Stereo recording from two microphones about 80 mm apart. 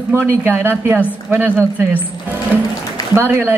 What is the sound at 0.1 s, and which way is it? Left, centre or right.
Speech, right.